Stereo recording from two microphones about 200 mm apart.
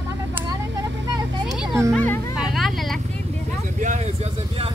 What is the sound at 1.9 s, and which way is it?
Speech, 10° left (ahead or behind).